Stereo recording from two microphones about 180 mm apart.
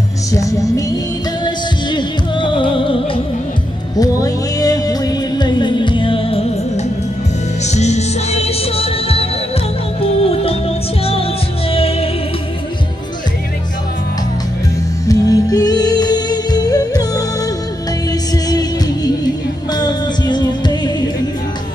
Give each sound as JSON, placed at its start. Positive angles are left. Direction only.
{"t": 0.3, "sound": "music", "side_deg": 20}
{"t": 11.7, "sound": "music", "side_deg": 30}
{"t": 15.0, "sound": "music", "side_deg": 20}
{"t": 18.3, "sound": "music", "side_deg": 20}